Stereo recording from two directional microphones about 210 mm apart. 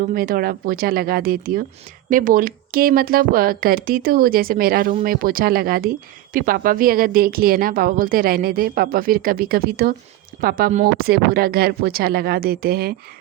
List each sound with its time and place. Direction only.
0.1 s a woman's voice: 45° right (ahead or behind)